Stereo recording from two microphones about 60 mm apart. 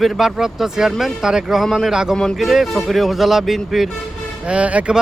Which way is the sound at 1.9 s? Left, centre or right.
Centre.